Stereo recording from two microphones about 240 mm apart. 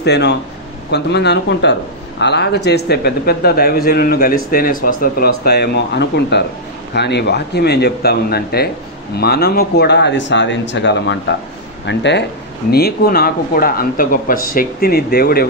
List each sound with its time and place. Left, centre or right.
0.0 s a man's voice: left